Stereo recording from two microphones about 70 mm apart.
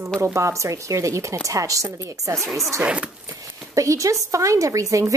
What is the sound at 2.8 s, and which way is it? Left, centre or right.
Speech, centre.